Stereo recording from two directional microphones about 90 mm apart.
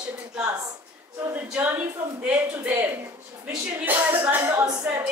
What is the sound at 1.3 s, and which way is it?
Speech, 20° right (ahead or behind).